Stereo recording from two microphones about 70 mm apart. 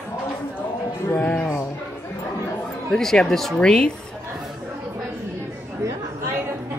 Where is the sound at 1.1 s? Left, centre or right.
Left.